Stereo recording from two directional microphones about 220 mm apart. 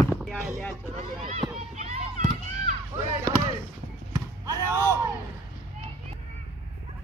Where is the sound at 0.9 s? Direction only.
30° right (ahead or behind).